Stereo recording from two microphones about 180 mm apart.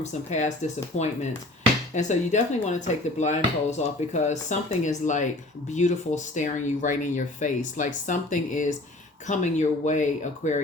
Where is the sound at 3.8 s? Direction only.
40° left (ahead or behind).